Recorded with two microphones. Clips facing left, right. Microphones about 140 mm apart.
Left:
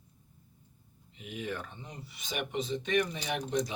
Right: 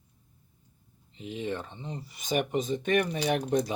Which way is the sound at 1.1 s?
25° right (ahead or behind).